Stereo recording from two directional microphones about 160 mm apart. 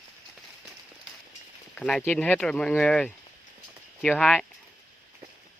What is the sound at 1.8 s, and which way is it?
Speech, 5° left (ahead or behind).